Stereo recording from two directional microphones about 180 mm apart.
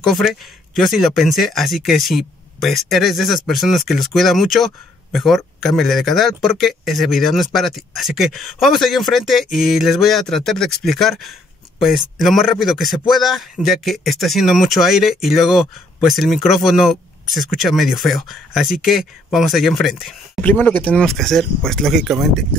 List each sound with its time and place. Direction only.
0.0 s speech: centre (ahead or behind)